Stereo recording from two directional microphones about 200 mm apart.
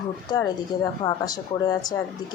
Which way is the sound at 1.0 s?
20° left (ahead or behind).